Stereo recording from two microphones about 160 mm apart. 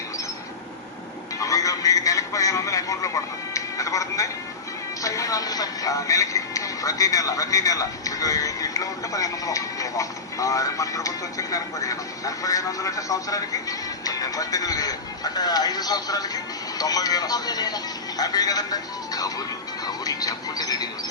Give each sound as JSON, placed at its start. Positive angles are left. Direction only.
{"t": 1.4, "sound": "speech", "side_deg": 20}